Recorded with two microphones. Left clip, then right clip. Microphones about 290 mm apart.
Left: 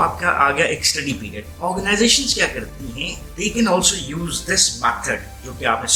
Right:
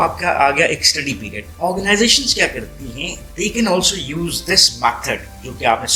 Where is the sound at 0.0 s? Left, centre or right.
Centre.